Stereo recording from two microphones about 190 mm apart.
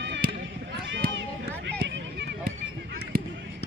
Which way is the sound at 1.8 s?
70° right (ahead or behind).